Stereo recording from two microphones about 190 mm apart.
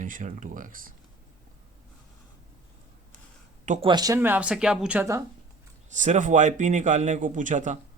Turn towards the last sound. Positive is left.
turn(degrees=-40)  # may be behind; listen again after turning